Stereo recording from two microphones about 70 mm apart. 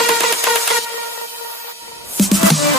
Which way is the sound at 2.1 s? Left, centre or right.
Centre.